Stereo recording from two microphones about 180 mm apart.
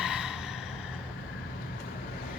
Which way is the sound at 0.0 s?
5° right (ahead or behind).